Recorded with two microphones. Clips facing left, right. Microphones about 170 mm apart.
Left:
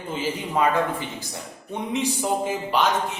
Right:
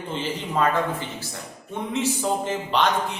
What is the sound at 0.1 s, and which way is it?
A man's voice, 10° left (ahead or behind).